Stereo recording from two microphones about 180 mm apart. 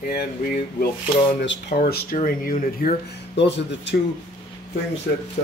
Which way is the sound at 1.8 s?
50° left (ahead or behind).